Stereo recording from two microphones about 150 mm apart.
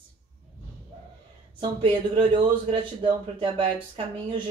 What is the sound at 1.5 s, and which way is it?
Speech, 35° right (ahead or behind).